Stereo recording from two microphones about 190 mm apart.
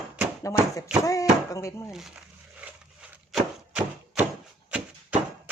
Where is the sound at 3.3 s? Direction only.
5° right (ahead or behind).